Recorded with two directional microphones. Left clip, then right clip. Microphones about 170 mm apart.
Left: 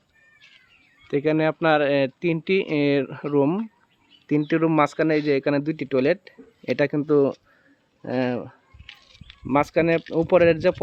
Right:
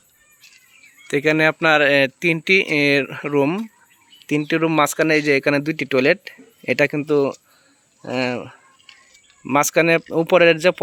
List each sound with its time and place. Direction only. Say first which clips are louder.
1.0 s speech: right 5 dB; centre (ahead or behind)
7.0 s speech: right 1 dB; 15° left (ahead or behind)
8.5 s a sound: even; 5° right (ahead or behind)
10.2 s speech: right 3 dB; centre (ahead or behind)